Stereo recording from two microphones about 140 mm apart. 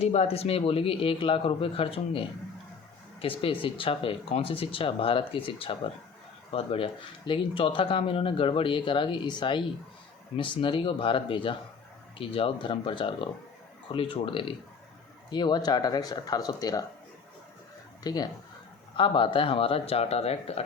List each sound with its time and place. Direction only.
0.0 s speech: 50° left (ahead or behind); by 16.8 s 25° left (ahead or behind)
18.0 s speech: 30° left (ahead or behind); by 20.7 s 45° left (ahead or behind)